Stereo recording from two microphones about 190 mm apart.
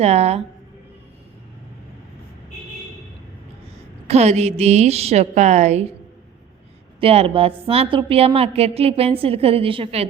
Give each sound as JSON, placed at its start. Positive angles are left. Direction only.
{"t": 0.0, "sound": "a woman's voice", "side_deg": -35}
{"t": 4.0, "sound": "a woman's voice", "side_deg": -35}
{"t": 7.0, "sound": "a woman's voice", "side_deg": -30}